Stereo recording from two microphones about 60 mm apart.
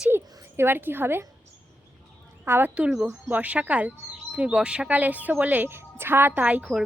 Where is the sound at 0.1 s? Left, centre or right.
Right.